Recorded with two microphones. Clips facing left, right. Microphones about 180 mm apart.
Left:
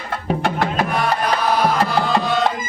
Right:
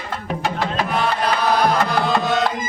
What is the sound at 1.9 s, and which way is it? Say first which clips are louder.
Music: even; centre (ahead or behind).